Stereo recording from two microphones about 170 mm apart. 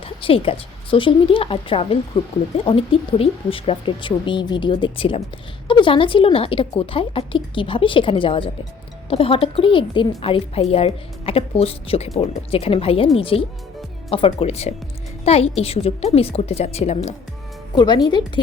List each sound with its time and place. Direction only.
0.0 s a woman's voice: 30° left (ahead or behind)
17.7 s speech: 25° left (ahead or behind)